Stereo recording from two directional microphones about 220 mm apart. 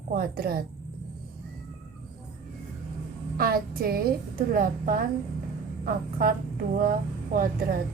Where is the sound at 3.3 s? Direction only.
40° right (ahead or behind).